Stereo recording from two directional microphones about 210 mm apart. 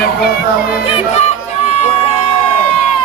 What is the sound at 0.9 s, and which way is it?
Music, 30° left (ahead or behind).